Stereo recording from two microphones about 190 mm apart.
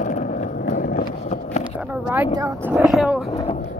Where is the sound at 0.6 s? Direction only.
55° left (ahead or behind); by 1.6 s 40° left (ahead or behind).